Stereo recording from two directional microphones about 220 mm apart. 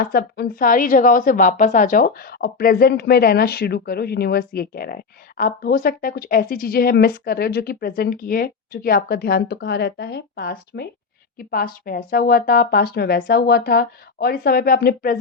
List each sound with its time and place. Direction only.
0.0 s a woman's voice: 45° left (ahead or behind)